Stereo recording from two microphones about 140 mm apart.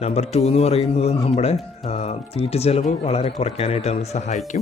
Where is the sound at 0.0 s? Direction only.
50° left (ahead or behind).